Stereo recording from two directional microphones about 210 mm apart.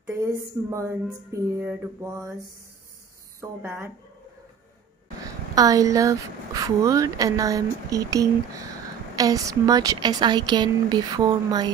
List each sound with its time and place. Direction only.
0.0 s a woman's voice: 10° right (ahead or behind)
3.3 s a woman's voice: 10° right (ahead or behind)
5.2 s a woman's voice: 15° right (ahead or behind)